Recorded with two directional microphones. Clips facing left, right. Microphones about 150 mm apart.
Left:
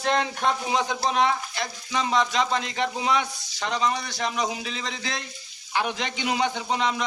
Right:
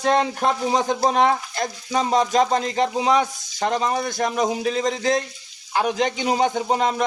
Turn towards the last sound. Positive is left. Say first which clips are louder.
# right 5 dB
turn(degrees=-45)  # may be behind; listen again after turning